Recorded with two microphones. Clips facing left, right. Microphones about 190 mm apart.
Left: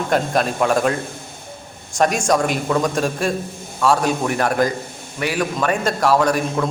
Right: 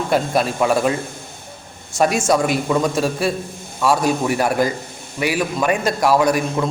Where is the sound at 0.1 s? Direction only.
5° right (ahead or behind).